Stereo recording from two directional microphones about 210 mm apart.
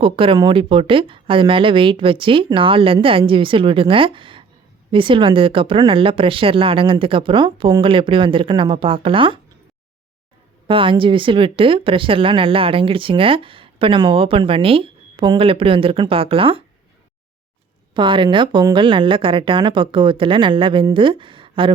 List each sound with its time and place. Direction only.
0.0 s speech: 25° right (ahead or behind)
10.7 s speech: 25° right (ahead or behind)
17.9 s speech: 25° right (ahead or behind)